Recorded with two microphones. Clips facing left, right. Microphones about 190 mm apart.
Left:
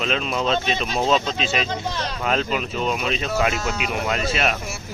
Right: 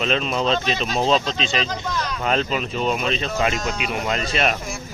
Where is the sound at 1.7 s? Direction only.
30° left (ahead or behind).